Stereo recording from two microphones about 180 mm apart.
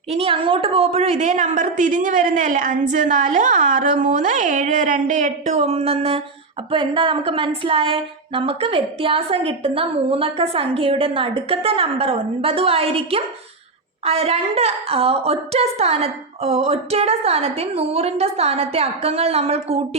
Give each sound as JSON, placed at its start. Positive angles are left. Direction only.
{"t": 0.1, "sound": "a woman's voice", "side_deg": -30}